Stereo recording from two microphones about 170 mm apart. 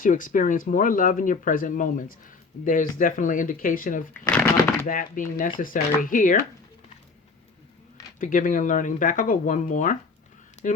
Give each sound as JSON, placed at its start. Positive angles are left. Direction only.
{"t": 0.0, "sound": "speech", "side_deg": 50}
{"t": 4.2, "sound": "shuffling cards", "side_deg": 10}
{"t": 4.9, "sound": "speech", "side_deg": 50}
{"t": 8.2, "sound": "speech", "side_deg": 50}